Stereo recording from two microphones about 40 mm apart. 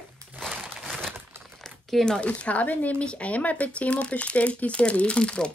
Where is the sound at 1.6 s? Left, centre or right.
Centre.